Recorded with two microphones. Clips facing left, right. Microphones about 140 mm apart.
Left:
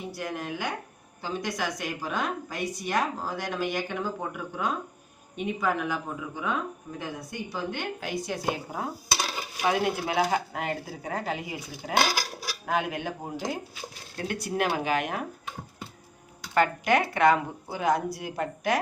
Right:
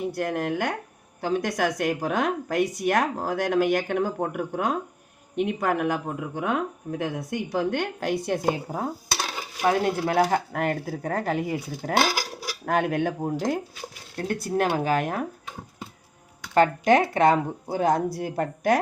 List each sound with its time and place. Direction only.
0.2 s speech: 60° right (ahead or behind)
9.6 s speech: 45° right (ahead or behind)
14.2 s speech: 45° right (ahead or behind)
16.6 s speech: 40° right (ahead or behind)